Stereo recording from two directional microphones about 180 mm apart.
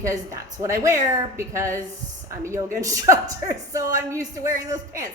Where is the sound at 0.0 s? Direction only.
20° right (ahead or behind).